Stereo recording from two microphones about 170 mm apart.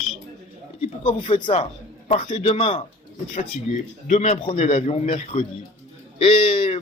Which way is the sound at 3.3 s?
45° left (ahead or behind).